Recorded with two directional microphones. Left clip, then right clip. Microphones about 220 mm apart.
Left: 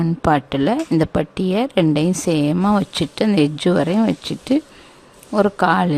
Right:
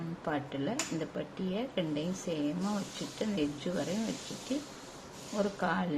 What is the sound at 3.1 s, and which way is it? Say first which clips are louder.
Speech: left 16 dB; 50° left (ahead or behind).